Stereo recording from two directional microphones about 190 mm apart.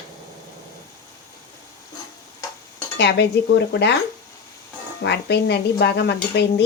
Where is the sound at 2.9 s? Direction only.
65° left (ahead or behind).